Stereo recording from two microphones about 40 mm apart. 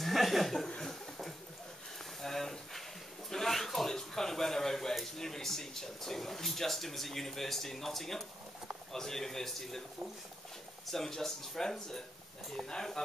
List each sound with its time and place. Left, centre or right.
0.0 s chuckle: centre
0.8 s a sound: centre
2.2 s speech: centre
10.9 s speech: centre